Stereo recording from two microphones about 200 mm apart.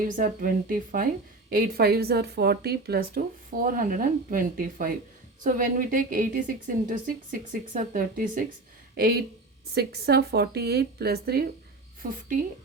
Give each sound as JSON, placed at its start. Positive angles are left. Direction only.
{"t": 0.2, "sound": "a woman's voice", "side_deg": -45}